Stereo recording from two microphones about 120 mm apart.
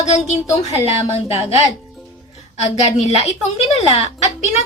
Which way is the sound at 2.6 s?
65° left (ahead or behind).